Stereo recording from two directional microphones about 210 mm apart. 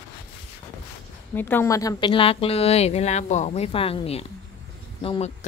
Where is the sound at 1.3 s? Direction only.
10° left (ahead or behind).